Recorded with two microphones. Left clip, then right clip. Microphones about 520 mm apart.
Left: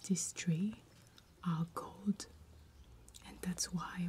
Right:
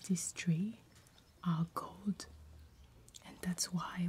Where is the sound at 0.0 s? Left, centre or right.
Centre.